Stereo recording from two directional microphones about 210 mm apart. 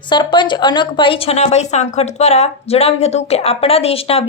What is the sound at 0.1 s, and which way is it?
A woman's voice, 20° left (ahead or behind).